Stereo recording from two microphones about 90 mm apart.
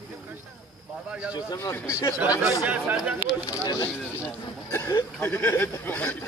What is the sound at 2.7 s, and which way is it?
Speech, 15° right (ahead or behind).